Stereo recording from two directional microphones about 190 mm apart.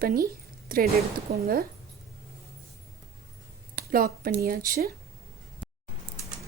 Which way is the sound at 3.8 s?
50° right (ahead or behind).